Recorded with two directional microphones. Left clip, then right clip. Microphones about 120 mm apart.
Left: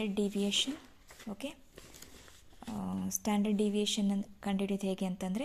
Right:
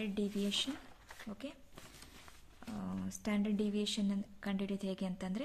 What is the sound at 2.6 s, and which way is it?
Speech, 10° left (ahead or behind).